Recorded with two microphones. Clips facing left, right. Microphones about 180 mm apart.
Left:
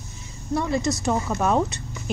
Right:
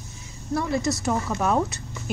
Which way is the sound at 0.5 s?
5° right (ahead or behind).